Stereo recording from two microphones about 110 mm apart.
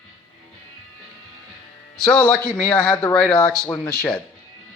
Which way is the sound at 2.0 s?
5° left (ahead or behind).